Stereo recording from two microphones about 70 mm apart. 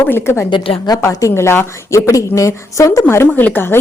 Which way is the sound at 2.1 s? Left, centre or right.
Left.